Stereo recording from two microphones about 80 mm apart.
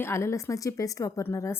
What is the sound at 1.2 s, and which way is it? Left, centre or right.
Speech, left.